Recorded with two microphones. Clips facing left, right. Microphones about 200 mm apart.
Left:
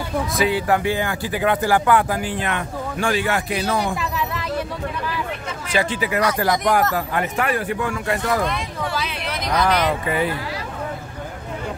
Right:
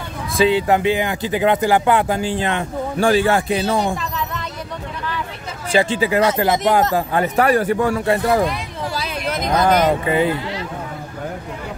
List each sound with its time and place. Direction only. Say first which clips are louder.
0.4 s speech: right 5 dB; 25° right (ahead or behind)
5.7 s speech: right 5 dB; 30° right (ahead or behind)
8.9 s a sound: right 3 dB; 40° right (ahead or behind)
10.0 s speech: right 4 dB; 25° right (ahead or behind)